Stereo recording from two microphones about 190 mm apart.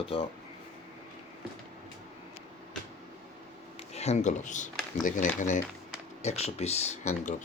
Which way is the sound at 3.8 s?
35° left (ahead or behind).